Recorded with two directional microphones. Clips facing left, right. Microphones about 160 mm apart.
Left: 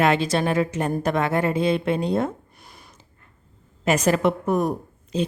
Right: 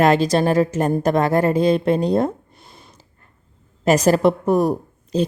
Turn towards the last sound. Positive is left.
turn(degrees=-35)  # may be behind; listen again after turning